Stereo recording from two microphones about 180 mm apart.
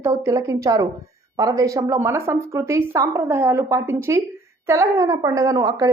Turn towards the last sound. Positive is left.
turn(degrees=-20)  # may be behind; listen again after turning